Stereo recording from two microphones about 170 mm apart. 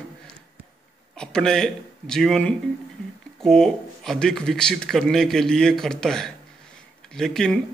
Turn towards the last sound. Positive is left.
turn(degrees=5)  # may be behind; listen again after turning